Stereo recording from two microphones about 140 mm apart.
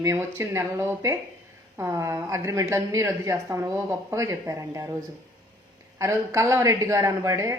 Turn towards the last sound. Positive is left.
turn(degrees=-20)  # may be behind; listen again after turning